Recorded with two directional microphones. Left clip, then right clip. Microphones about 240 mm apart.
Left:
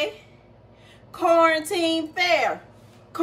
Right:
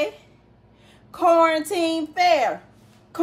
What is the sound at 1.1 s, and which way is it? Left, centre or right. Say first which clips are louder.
A woman's voice: right 1 dB; centre.